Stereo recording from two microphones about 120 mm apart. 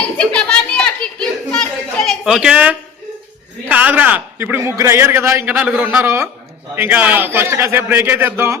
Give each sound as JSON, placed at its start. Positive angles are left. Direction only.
{"t": 0.0, "sound": "a sound", "side_deg": 10}
{"t": 3.7, "sound": "a man's voice", "side_deg": -15}
{"t": 5.5, "sound": "a man's voice", "side_deg": -10}
{"t": 6.0, "sound": "a man's voice", "side_deg": -25}